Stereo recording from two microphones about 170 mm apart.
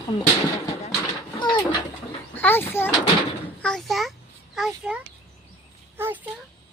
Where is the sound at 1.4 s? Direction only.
25° left (ahead or behind).